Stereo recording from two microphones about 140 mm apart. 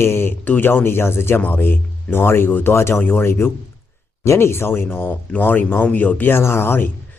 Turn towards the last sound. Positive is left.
turn(degrees=15)  # may be behind; listen again after turning